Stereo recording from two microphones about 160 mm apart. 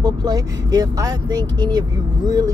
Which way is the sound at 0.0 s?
25° right (ahead or behind).